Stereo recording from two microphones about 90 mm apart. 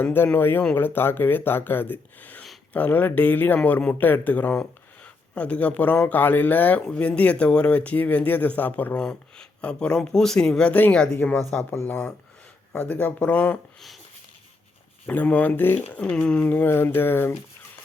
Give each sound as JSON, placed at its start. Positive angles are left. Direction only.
{"t": 0.0, "sound": "speech", "side_deg": 20}
{"t": 15.0, "sound": "speech", "side_deg": 15}
{"t": 16.0, "sound": "speech", "side_deg": 10}
{"t": 16.5, "sound": "speech", "side_deg": 20}